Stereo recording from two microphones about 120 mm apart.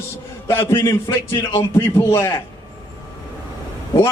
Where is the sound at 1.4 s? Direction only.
40° left (ahead or behind).